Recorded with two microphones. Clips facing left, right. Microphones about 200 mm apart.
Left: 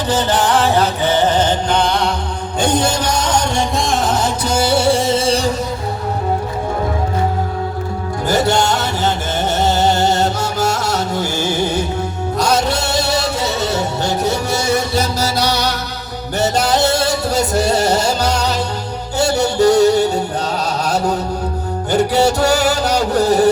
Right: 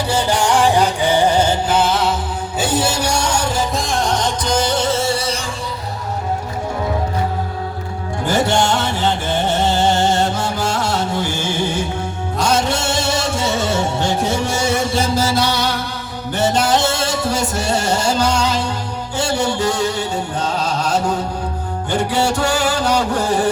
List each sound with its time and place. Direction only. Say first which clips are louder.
0.1 s music: left 2 dB; 10° right (ahead or behind); by 5.5 s 35° left (ahead or behind)
8.3 s music: left 1 dB; 40° left (ahead or behind)